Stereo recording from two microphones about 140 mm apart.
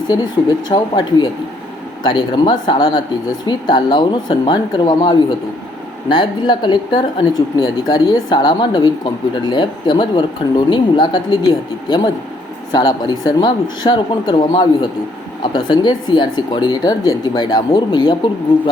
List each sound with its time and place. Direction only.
0.1 s speech: 25° left (ahead or behind)
12.7 s speech: 30° left (ahead or behind)